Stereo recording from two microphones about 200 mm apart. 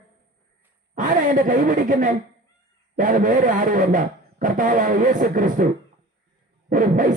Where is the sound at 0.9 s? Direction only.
40° right (ahead or behind).